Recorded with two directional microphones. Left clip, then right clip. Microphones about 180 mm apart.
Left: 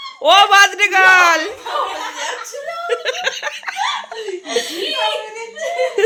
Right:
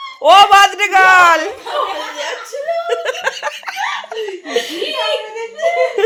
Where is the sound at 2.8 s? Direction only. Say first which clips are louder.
Right 1 dB; 15° left (ahead or behind).